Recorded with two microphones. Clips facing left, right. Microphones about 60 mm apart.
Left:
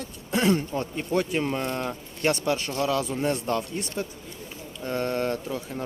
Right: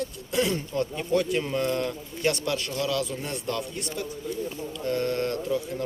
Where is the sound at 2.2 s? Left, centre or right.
Left.